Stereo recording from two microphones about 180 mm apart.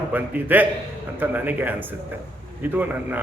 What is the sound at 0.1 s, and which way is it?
Speech, 10° right (ahead or behind).